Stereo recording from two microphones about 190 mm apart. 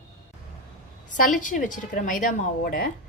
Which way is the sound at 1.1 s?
45° left (ahead or behind).